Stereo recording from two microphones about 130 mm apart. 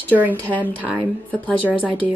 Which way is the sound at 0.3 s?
15° left (ahead or behind).